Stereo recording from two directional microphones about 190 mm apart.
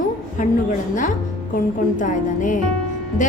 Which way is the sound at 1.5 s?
40° left (ahead or behind).